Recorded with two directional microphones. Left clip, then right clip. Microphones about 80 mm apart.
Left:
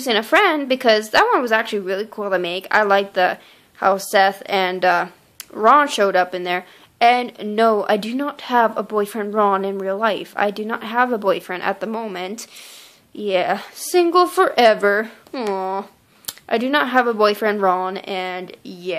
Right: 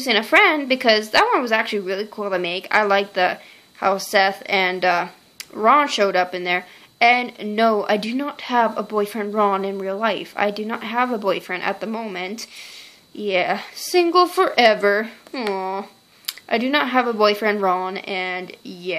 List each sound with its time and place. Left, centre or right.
0.0 s a woman's voice: left